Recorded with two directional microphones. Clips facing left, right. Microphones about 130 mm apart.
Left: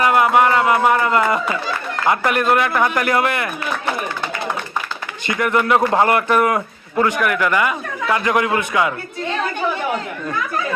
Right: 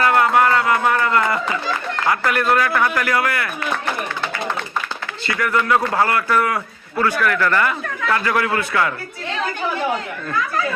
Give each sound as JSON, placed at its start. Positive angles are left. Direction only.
{"t": 0.0, "sound": "a sound", "side_deg": 15}
{"t": 2.0, "sound": "a man's voice", "side_deg": 20}
{"t": 5.2, "sound": "a man's voice", "side_deg": 20}